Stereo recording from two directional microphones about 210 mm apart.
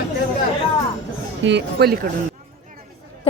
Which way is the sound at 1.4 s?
50° right (ahead or behind).